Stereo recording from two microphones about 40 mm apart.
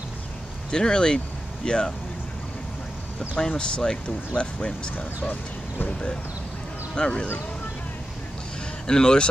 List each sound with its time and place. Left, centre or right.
0.7 s speech: left
3.3 s speech: left
4.9 s speech: left
5.9 s speech: left
8.8 s speech: centre